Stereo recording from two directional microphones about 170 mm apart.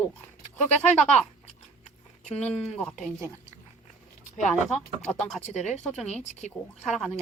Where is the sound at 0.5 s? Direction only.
40° left (ahead or behind).